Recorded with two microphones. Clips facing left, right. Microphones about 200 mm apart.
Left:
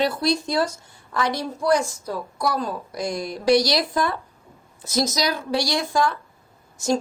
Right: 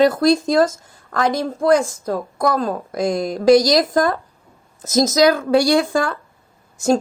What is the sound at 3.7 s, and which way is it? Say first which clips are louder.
A woman's voice: right 7 dB; 45° right (ahead or behind).